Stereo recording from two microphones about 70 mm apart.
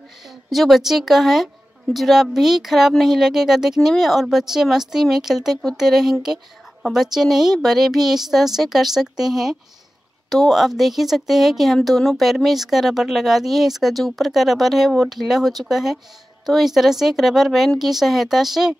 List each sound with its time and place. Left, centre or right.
0.5 s speech: centre